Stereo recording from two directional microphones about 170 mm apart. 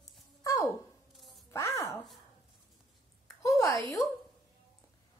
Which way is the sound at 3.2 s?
20° left (ahead or behind).